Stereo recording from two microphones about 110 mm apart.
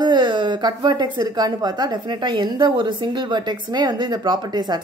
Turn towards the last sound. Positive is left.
turn(degrees=-40)  # may be behind; listen again after turning